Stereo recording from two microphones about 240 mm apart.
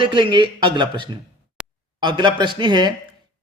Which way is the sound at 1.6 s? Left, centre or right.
Centre.